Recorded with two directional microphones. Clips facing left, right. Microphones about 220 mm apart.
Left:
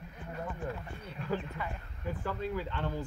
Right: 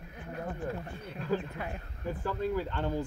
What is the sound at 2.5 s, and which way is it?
Speech, 40° right (ahead or behind).